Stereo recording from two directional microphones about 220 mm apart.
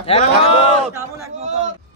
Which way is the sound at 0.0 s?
25° left (ahead or behind).